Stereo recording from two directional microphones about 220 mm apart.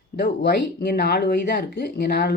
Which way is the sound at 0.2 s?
45° left (ahead or behind).